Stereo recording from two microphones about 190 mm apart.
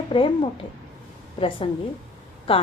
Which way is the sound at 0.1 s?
25° left (ahead or behind).